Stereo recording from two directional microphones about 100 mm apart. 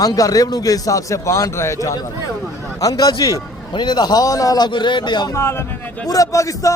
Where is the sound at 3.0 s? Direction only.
40° left (ahead or behind).